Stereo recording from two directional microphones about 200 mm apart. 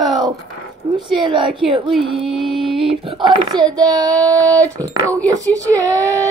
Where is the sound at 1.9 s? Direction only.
Centre (ahead or behind).